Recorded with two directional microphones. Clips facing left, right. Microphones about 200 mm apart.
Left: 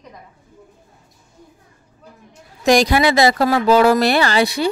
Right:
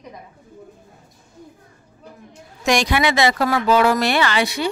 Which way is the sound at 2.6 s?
35° left (ahead or behind).